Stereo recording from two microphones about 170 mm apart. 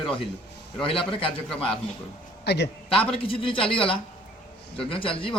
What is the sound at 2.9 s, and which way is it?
A man's voice, 30° left (ahead or behind).